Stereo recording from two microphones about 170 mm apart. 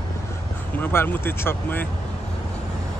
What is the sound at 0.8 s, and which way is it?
Speech, 10° left (ahead or behind).